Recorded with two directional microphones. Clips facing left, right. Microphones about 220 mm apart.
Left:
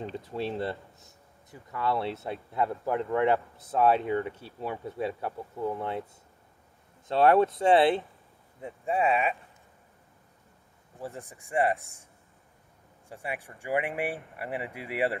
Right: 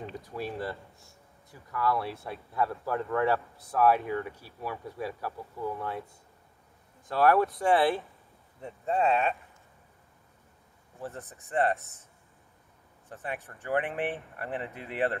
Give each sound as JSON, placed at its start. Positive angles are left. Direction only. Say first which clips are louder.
{"t": 0.0, "sound": "speech", "louder": "left 3 dB", "side_deg": 25}
{"t": 7.1, "sound": "speech", "louder": "left 2 dB", "side_deg": 25}
{"t": 8.5, "sound": "speech", "louder": "even", "side_deg": 10}
{"t": 11.0, "sound": "speech", "louder": "left 1 dB", "side_deg": 10}
{"t": 13.1, "sound": "speech", "louder": "left 1 dB", "side_deg": 10}